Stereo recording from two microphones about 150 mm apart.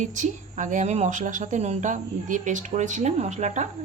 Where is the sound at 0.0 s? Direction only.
55° right (ahead or behind).